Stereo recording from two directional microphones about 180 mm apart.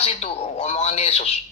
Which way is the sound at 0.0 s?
35° left (ahead or behind).